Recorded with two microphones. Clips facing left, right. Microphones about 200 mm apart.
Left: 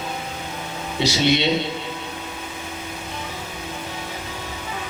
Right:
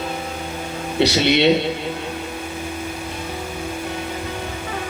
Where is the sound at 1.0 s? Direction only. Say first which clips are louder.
Right 3 dB; 60° right (ahead or behind).